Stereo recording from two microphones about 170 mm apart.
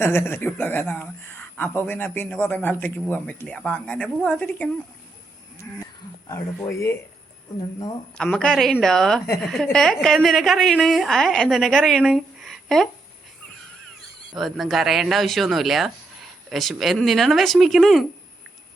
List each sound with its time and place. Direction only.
0.0 s speech: 15° left (ahead or behind)
6.2 s speech: 20° left (ahead or behind)
8.2 s a woman's voice: 5° left (ahead or behind)
14.3 s a woman's voice: centre (ahead or behind)